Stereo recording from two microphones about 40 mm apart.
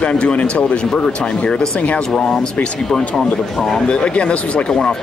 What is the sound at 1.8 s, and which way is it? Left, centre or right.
Speech, left.